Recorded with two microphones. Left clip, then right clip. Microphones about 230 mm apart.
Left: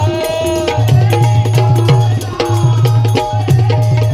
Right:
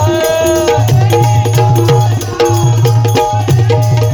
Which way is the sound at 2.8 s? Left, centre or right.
Right.